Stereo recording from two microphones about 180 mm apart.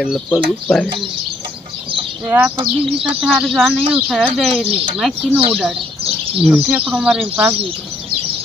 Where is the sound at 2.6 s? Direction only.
30° right (ahead or behind).